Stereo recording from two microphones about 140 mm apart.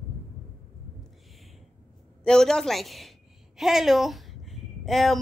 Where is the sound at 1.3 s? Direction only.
Centre (ahead or behind).